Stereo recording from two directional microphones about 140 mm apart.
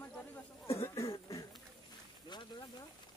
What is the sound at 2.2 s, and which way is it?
Speech, 30° left (ahead or behind).